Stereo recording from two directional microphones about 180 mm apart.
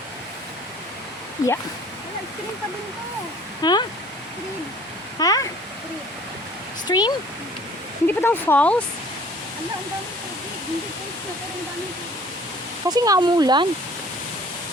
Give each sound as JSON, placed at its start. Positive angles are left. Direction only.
{"t": 1.4, "sound": "speech", "side_deg": 20}
{"t": 3.6, "sound": "speech", "side_deg": 25}
{"t": 5.2, "sound": "speech", "side_deg": 20}
{"t": 6.8, "sound": "speech", "side_deg": 25}
{"t": 8.0, "sound": "speech", "side_deg": 10}
{"t": 12.9, "sound": "speech", "side_deg": -20}